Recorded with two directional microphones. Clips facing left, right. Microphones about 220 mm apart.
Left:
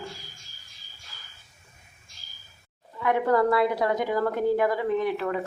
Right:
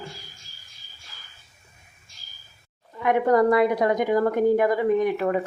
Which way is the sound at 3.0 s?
20° right (ahead or behind).